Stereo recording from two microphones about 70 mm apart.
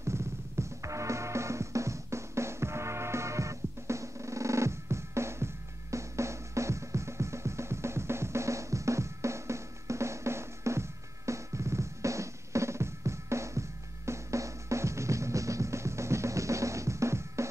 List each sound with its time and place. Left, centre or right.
0.0 s music: right